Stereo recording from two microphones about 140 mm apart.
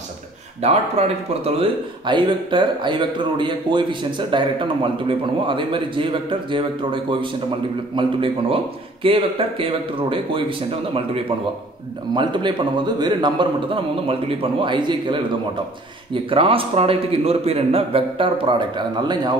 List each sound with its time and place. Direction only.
0.6 s speech: 50° right (ahead or behind)
12.1 s speech: 35° right (ahead or behind)